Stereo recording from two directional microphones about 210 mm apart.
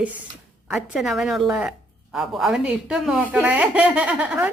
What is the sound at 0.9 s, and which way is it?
Speech, centre (ahead or behind).